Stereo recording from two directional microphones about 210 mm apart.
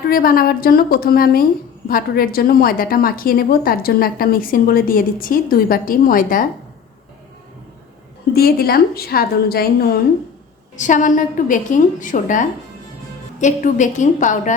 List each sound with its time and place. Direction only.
0.1 s a woman's voice: 45° left (ahead or behind)
8.3 s a woman's voice: 45° left (ahead or behind)
10.8 s a woman's voice: 35° left (ahead or behind)